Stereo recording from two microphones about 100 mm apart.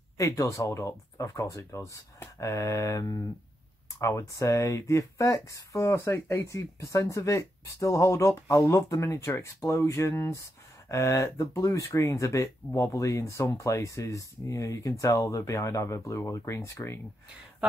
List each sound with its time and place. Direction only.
0.2 s speech: 30° left (ahead or behind)